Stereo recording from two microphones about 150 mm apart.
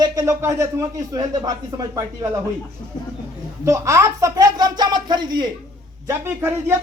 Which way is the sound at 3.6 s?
20° right (ahead or behind).